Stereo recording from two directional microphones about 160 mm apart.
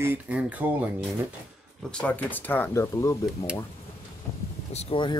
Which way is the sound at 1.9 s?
10° left (ahead or behind).